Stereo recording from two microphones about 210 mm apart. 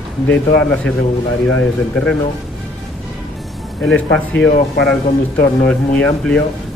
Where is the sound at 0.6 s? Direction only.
5° left (ahead or behind).